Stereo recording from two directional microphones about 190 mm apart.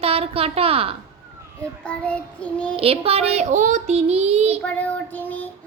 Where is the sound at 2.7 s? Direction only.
30° right (ahead or behind).